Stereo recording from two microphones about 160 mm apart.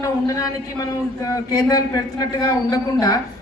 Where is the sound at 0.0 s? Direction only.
20° left (ahead or behind).